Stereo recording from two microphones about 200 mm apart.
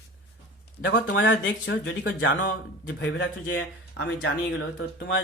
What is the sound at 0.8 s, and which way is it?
Speech, 60° left (ahead or behind).